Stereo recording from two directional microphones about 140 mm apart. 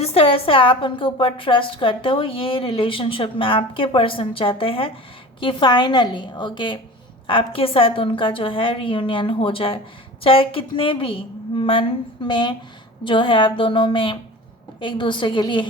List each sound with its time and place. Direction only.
0.0 s a woman's voice: 45° left (ahead or behind)